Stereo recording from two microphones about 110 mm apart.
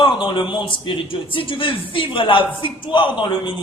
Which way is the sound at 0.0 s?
45° left (ahead or behind).